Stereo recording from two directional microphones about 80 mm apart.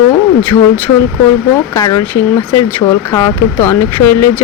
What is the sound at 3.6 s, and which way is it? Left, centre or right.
Speech, left.